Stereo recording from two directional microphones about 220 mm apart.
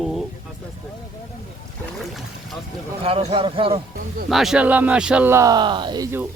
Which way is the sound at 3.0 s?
25° right (ahead or behind).